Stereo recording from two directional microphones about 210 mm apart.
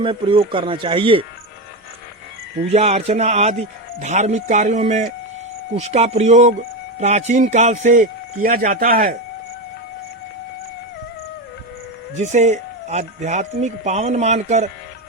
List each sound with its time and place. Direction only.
0.0 s speech: 25° right (ahead or behind)
2.7 s speech: 30° right (ahead or behind)
12.1 s speech: 35° right (ahead or behind)